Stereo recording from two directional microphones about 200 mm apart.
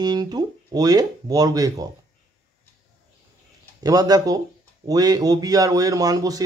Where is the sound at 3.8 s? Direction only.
20° right (ahead or behind).